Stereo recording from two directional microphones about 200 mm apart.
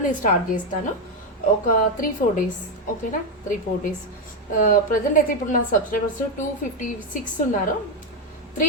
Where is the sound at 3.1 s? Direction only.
40° left (ahead or behind).